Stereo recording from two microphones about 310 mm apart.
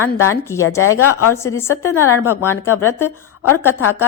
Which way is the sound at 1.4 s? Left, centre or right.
Centre.